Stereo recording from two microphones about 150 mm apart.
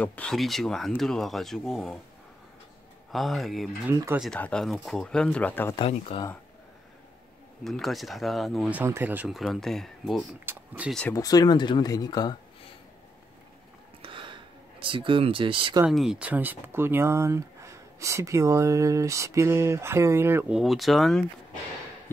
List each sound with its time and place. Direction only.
0.0 s speech: 10° left (ahead or behind)
3.1 s speech: centre (ahead or behind)
5.8 s speech: 35° left (ahead or behind)
7.6 s speech: centre (ahead or behind)
8.7 s speech: 15° right (ahead or behind)
9.3 s speech: centre (ahead or behind)
10.4 s speech: 15° right (ahead or behind)
10.9 s speech: 5° left (ahead or behind)
11.1 s speech: 25° left (ahead or behind)
14.0 s a sound: 35° right (ahead or behind)
15.9 s speech: 5° right (ahead or behind)
20.5 s speech: centre (ahead or behind)